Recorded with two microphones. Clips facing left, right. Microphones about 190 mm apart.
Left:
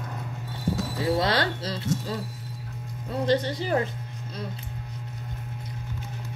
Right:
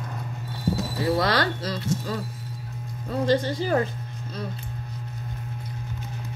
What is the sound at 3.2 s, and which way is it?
Speech, 20° left (ahead or behind).